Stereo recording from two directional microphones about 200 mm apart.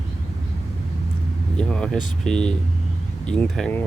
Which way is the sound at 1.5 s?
5° left (ahead or behind).